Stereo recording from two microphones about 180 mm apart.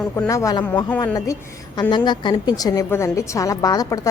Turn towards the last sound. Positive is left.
turn(degrees=20)  # may be behind; listen again after turning